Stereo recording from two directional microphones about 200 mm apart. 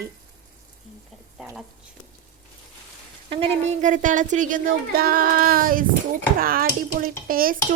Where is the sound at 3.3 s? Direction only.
30° right (ahead or behind).